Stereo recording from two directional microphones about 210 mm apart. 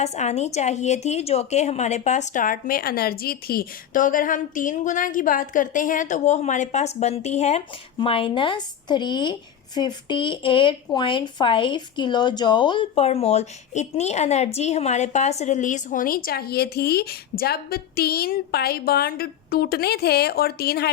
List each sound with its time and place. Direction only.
0.0 s a woman's voice: 30° left (ahead or behind); by 20.9 s 50° left (ahead or behind)